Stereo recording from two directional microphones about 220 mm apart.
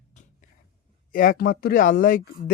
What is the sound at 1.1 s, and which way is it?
A man's voice, 40° left (ahead or behind).